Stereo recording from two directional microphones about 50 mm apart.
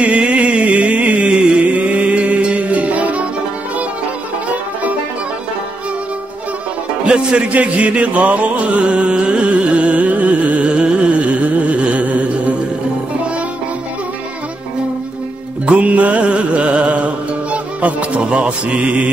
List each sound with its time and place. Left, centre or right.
0.0 s music: right
7.1 s music: right
15.6 s music: right